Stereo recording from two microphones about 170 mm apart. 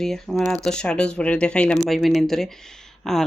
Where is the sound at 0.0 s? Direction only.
Centre (ahead or behind).